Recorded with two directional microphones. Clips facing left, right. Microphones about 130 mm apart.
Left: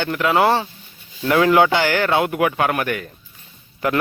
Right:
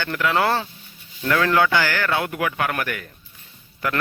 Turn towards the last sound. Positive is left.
turn(degrees=20)  # may be behind; listen again after turning